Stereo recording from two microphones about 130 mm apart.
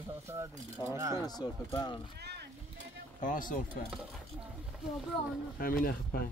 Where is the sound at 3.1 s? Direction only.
85° left.